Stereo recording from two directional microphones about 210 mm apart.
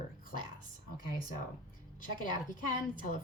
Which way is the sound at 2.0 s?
40° left (ahead or behind).